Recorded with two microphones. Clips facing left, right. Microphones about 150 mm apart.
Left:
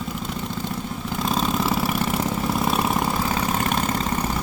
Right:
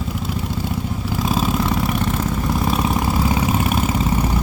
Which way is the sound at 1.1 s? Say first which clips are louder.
Right 3 dB; 5° right (ahead or behind).